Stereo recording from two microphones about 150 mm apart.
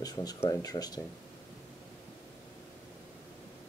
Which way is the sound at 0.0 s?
25° left (ahead or behind).